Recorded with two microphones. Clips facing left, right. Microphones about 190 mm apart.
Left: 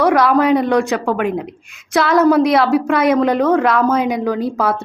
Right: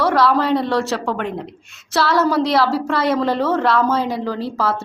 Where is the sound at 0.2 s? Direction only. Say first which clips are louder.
Left 3 dB; 15° left (ahead or behind).